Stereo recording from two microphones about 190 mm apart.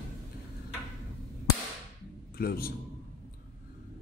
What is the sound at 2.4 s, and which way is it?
Speech, 55° left (ahead or behind).